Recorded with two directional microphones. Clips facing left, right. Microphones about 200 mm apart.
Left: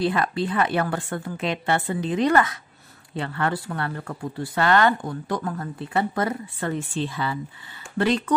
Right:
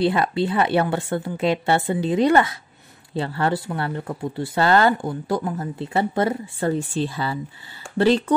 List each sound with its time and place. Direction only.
0.0 s a woman's voice: 30° right (ahead or behind)